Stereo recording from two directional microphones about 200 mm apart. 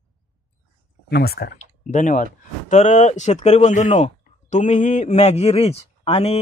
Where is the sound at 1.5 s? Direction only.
35° left (ahead or behind).